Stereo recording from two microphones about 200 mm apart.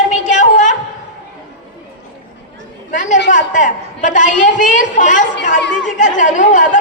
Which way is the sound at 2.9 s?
40° left (ahead or behind).